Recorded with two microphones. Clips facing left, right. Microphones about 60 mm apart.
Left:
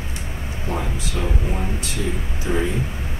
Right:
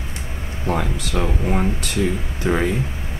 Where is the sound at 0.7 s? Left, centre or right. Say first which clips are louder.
Right 5 dB; right.